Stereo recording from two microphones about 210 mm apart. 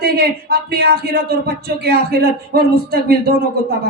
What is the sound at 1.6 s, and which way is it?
Music, 50° right (ahead or behind).